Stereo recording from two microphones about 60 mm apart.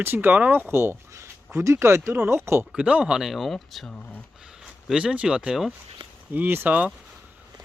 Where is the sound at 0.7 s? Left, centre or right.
Right.